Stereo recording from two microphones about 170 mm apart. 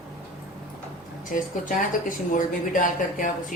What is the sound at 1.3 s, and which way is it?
A woman's voice, 50° left (ahead or behind).